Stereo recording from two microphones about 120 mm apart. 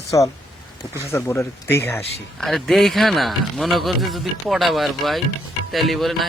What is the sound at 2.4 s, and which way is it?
Speech, centre (ahead or behind).